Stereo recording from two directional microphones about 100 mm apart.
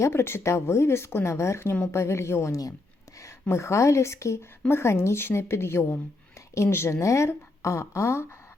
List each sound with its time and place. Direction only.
0.0 s speech: 25° left (ahead or behind)